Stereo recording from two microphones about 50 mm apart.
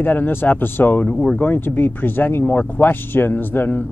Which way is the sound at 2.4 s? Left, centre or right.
Left.